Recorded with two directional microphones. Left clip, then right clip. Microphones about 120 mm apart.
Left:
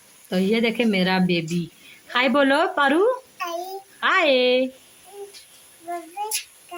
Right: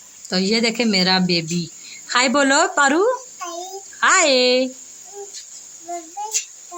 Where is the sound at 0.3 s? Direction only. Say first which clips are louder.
Right 2 dB; 5° right (ahead or behind).